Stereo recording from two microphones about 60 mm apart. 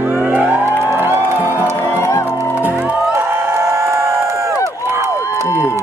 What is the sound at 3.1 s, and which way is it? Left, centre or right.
Crowd, right.